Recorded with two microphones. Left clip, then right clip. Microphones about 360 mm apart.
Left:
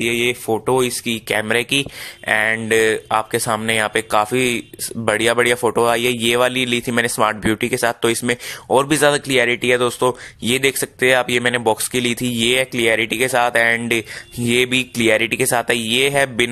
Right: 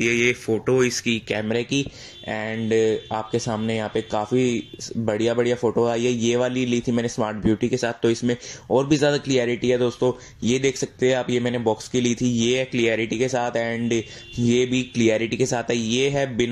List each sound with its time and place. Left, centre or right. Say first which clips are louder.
0.0 s speech: left 2 dB; centre
5.6 s speech: left 4 dB; left
5.9 s speech: left 5 dB; left